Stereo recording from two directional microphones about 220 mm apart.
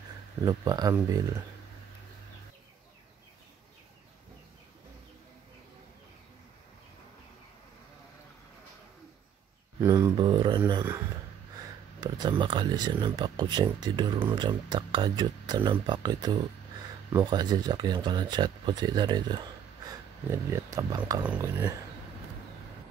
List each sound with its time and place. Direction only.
0.5 s speech: 15° right (ahead or behind)
9.8 s speech: 15° right (ahead or behind)
12.0 s speech: 20° right (ahead or behind)